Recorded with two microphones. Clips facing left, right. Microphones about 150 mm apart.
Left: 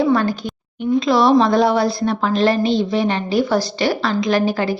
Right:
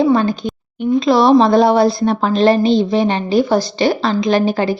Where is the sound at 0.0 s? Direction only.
20° right (ahead or behind).